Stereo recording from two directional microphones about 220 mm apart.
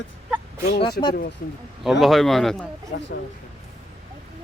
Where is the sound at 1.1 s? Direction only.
45° left (ahead or behind).